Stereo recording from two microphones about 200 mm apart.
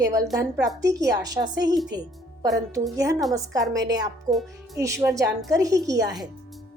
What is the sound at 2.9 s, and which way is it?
A woman's voice, 15° right (ahead or behind).